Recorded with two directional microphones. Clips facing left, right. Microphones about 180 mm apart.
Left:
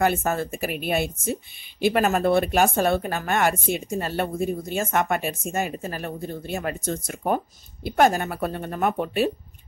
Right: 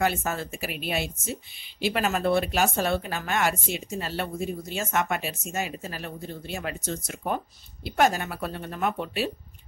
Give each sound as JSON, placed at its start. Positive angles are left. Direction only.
{"t": 0.0, "sound": "speech", "side_deg": 50}